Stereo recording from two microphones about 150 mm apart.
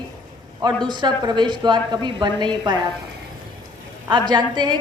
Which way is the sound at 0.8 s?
30° right (ahead or behind).